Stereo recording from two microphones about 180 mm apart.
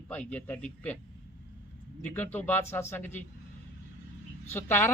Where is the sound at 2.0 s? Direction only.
10° left (ahead or behind).